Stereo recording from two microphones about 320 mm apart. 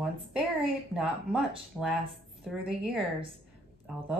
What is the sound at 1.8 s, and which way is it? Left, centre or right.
Speech, centre.